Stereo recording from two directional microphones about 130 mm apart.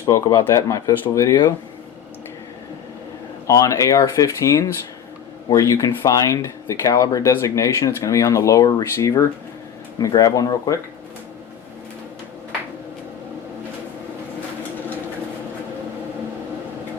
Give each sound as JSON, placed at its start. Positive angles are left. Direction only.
{"t": 0.0, "sound": "speech", "side_deg": 25}
{"t": 3.4, "sound": "speech", "side_deg": 25}